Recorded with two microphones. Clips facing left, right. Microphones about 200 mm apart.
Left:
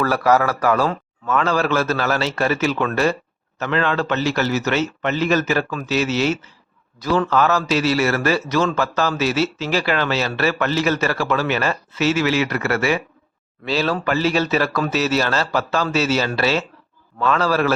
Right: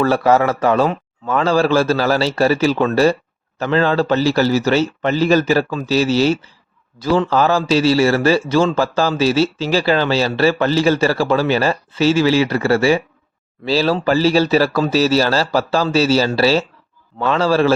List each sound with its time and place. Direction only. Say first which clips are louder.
0.0 s a man's voice: right 3 dB; 25° right (ahead or behind)